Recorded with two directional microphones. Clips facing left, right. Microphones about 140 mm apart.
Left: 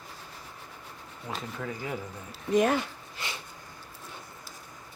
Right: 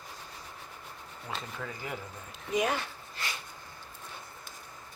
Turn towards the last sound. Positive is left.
turn(degrees=20)  # may be behind; listen again after turning